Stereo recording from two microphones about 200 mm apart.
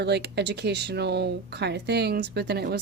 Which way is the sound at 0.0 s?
55° right (ahead or behind).